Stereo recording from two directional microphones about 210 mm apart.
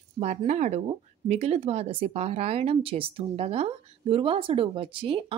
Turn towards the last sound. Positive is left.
turn(degrees=-25)  # may be behind; listen again after turning